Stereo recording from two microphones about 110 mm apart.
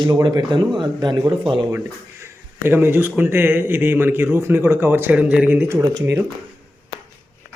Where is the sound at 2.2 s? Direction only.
20° right (ahead or behind).